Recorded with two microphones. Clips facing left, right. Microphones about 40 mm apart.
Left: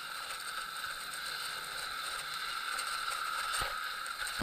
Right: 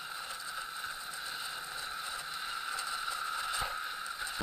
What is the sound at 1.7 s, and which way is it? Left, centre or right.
Vehicle, left.